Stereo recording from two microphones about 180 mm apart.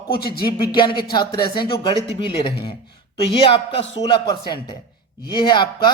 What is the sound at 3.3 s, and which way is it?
Speech, 30° left (ahead or behind).